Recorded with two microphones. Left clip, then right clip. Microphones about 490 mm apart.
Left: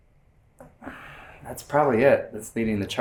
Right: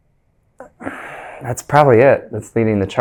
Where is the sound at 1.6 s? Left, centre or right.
Right.